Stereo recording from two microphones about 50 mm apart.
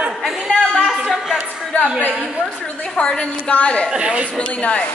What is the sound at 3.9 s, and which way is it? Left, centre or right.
Speech, centre.